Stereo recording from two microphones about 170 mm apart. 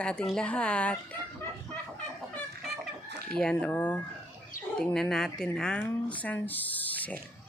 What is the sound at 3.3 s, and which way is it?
Speech, 5° left (ahead or behind).